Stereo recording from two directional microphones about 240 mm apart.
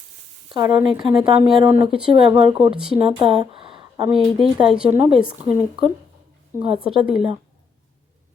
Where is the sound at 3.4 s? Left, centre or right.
Right.